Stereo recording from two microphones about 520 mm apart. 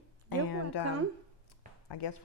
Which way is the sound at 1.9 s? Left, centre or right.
Left.